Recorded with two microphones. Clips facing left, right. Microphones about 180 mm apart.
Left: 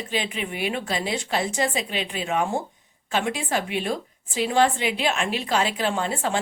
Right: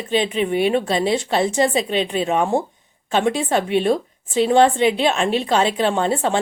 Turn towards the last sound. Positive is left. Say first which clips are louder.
# right 6 dB
turn(degrees=-25)  # may be behind; listen again after turning